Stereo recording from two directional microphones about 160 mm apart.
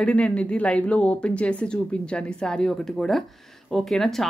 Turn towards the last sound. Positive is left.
turn(degrees=0)  # may be behind; listen again after turning